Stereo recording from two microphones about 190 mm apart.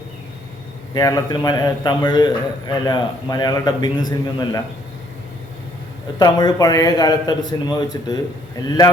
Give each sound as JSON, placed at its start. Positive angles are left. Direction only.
{"t": 0.9, "sound": "a man's voice", "side_deg": 20}
{"t": 6.1, "sound": "a man's voice", "side_deg": 20}